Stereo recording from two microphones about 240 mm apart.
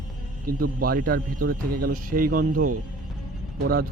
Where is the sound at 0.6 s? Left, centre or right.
Right.